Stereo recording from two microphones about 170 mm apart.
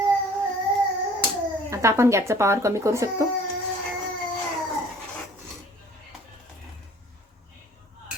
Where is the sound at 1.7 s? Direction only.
15° right (ahead or behind).